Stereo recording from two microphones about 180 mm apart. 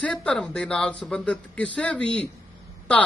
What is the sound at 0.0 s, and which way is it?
Speech, 5° left (ahead or behind).